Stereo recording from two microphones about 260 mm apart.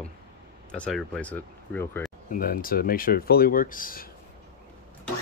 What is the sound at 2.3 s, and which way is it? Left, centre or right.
Speech, left.